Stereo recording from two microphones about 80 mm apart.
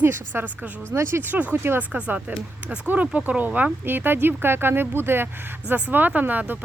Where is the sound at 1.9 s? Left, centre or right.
Centre.